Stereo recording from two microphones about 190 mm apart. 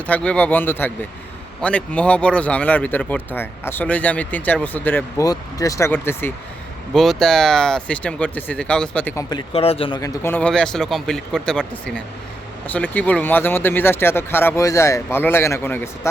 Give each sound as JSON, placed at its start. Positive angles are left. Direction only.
{"t": 0.1, "sound": "speech", "side_deg": 5}
{"t": 9.3, "sound": "speech", "side_deg": 30}
{"t": 10.0, "sound": "speech", "side_deg": 15}